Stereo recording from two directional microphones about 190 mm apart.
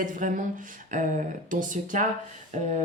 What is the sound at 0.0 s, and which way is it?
A woman's voice, 45° right (ahead or behind).